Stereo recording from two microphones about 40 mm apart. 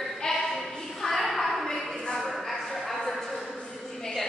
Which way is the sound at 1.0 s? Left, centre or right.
Centre.